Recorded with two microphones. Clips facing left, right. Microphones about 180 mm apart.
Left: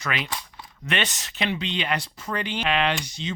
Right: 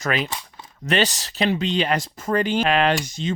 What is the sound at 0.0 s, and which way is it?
Speech, 45° right (ahead or behind).